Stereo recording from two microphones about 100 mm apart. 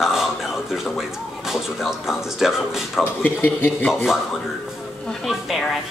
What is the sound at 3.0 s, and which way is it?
Speech, 20° left (ahead or behind).